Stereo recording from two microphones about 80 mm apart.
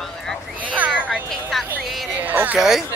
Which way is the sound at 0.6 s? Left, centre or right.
Centre.